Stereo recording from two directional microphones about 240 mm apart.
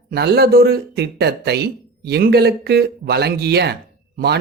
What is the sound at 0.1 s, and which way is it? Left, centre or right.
Speech, right.